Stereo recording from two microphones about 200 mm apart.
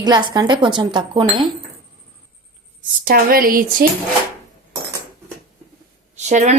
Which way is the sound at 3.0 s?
45° right (ahead or behind).